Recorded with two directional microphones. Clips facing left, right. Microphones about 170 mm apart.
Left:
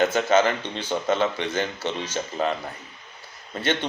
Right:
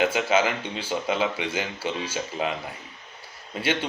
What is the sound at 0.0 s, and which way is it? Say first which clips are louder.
A man's voice: left 3 dB; 10° right (ahead or behind).